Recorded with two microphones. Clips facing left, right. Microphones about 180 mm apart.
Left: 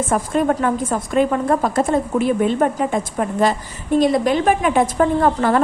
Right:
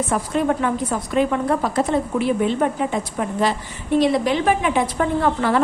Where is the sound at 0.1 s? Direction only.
45° left (ahead or behind).